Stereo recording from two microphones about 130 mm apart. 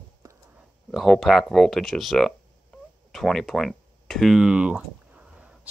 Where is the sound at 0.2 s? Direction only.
30° right (ahead or behind).